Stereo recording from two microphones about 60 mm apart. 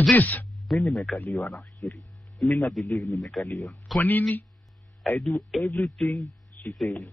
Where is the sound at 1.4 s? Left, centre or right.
Centre.